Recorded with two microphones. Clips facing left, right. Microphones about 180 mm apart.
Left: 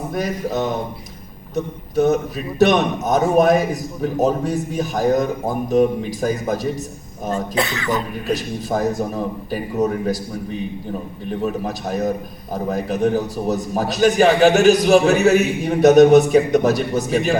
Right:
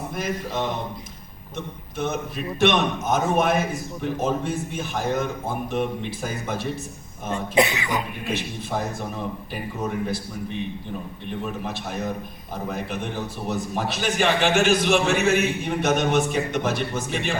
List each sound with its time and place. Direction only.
0.1 s a man's voice: 40° left (ahead or behind)
7.5 s speech: 15° right (ahead or behind)
8.3 s a man's voice: 40° left (ahead or behind)